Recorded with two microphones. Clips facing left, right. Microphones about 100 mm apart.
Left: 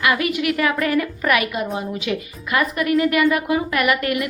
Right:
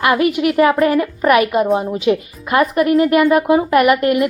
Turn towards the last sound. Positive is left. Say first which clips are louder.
# right 7 dB
turn(degrees=-35)  # may be behind; listen again after turning